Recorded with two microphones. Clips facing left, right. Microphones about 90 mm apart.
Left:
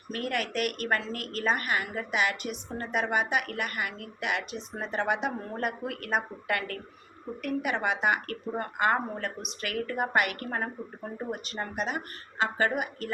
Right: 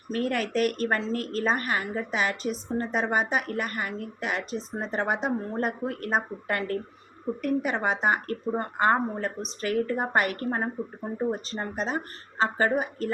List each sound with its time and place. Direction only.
0.1 s a woman's voice: 35° right (ahead or behind)